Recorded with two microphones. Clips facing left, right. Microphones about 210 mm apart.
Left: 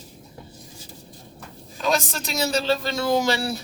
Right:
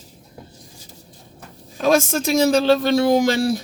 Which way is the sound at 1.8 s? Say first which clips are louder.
Right 7 dB; 50° right (ahead or behind).